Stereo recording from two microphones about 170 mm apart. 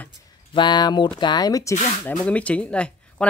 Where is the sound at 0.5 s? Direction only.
25° left (ahead or behind).